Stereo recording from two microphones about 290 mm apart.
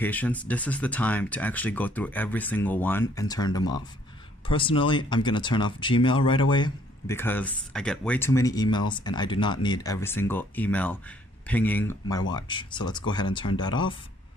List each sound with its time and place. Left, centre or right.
0.0 s speech: centre